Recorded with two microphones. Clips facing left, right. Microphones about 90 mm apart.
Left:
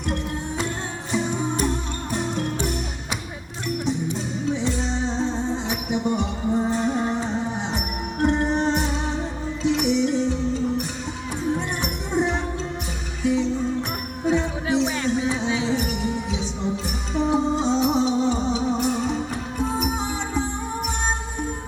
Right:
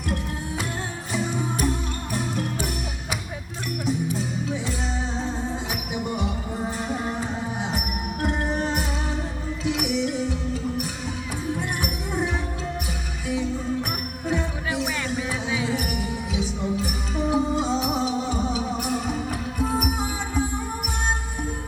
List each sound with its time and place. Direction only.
1.1 s music: 5° right (ahead or behind)
3.8 s music: 5° right (ahead or behind)
13.2 s music: 10° right (ahead or behind)
15.0 s music: 5° right (ahead or behind)
15.4 s music: 25° left (ahead or behind)
15.9 s music: 5° right (ahead or behind)